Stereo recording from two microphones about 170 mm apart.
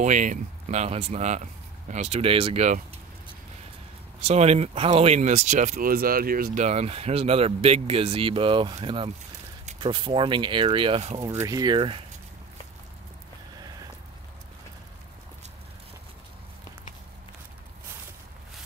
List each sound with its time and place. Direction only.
0.0 s speech: 45° right (ahead or behind)
4.2 s speech: 40° right (ahead or behind)
11.1 s speech: 20° right (ahead or behind)